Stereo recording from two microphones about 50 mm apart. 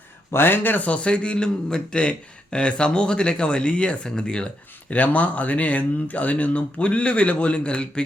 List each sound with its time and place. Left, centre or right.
0.3 s speech: left
0.9 s a man's voice: left
4.9 s a man's voice: left